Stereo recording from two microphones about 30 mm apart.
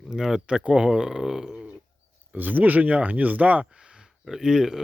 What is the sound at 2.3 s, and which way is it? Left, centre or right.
Speech, right.